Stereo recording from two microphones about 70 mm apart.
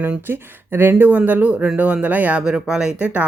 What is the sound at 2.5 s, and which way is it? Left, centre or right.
Speech, centre.